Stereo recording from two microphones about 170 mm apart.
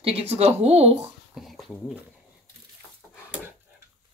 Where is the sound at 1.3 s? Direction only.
Centre (ahead or behind).